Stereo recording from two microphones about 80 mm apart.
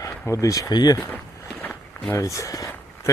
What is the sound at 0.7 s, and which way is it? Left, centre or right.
Speech, left.